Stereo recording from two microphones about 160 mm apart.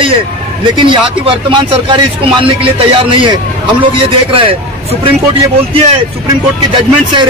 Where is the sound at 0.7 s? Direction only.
30° right (ahead or behind).